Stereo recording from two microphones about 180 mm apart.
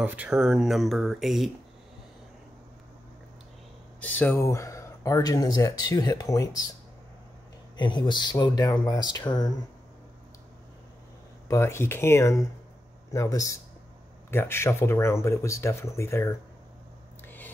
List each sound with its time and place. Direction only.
0.0 s speech: 10° right (ahead or behind)
4.0 s speech: 10° left (ahead or behind)
7.7 s speech: 25° left (ahead or behind)
11.4 s speech: 15° left (ahead or behind)